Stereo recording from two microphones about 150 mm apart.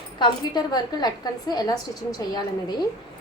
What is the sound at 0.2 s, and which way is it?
A woman's voice, 25° left (ahead or behind).